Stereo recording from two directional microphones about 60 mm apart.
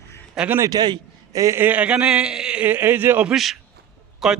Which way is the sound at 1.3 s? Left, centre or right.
Right.